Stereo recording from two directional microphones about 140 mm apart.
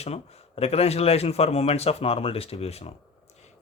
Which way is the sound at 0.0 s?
50° left (ahead or behind).